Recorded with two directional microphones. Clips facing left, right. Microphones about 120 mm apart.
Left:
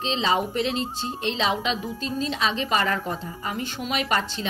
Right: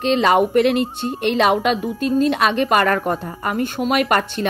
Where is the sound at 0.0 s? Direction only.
60° right (ahead or behind).